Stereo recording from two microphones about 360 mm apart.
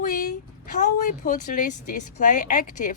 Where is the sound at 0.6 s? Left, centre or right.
Left.